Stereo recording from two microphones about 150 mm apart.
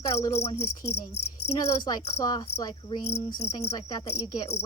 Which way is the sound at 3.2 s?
35° left (ahead or behind).